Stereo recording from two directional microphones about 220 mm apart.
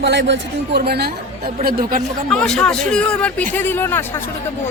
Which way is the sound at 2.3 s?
5° left (ahead or behind).